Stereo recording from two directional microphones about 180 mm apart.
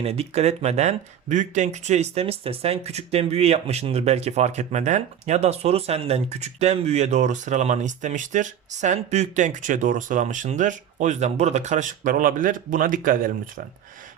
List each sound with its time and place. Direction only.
0.0 s speech: 35° right (ahead or behind)